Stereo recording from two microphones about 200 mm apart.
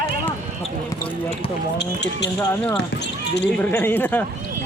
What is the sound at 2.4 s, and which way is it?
Speech, 10° left (ahead or behind).